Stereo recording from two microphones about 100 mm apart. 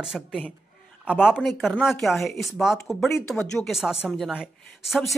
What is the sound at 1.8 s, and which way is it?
Speech, centre (ahead or behind).